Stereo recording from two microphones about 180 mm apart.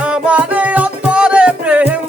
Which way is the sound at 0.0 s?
5° right (ahead or behind).